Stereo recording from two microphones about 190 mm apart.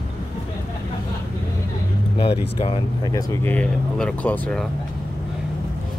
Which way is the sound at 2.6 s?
25° left (ahead or behind).